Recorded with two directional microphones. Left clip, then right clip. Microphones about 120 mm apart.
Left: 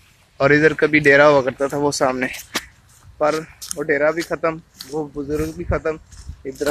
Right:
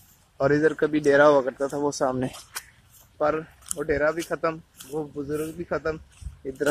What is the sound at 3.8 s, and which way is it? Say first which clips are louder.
Speech: left 6 dB; 10° right (ahead or behind).